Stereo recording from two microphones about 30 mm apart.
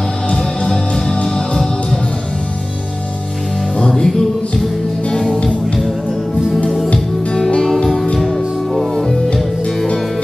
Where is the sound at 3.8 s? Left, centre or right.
Centre.